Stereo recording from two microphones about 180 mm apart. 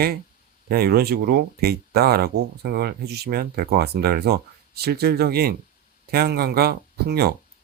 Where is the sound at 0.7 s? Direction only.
55° right (ahead or behind).